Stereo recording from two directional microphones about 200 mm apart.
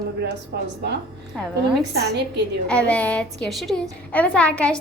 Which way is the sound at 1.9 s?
55° right (ahead or behind).